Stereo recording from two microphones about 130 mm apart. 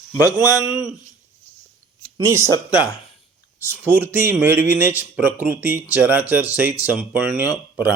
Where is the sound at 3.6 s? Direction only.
15° right (ahead or behind).